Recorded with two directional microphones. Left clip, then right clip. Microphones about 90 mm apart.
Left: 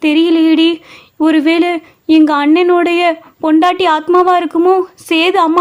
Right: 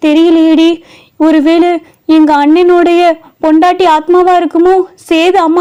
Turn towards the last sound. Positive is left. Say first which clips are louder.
# right 3 dB
turn(degrees=-25)  # may be behind; listen again after turning